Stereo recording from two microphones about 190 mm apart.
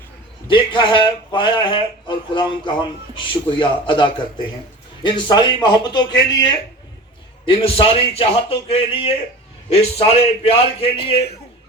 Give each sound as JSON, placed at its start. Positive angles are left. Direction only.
{"t": 0.4, "sound": "a man's voice", "side_deg": 25}